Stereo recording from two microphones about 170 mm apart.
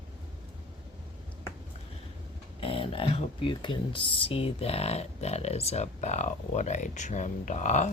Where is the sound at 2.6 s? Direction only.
30° left (ahead or behind).